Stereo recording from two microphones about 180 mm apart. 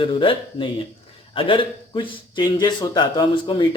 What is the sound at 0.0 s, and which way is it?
A man's voice, 30° left (ahead or behind).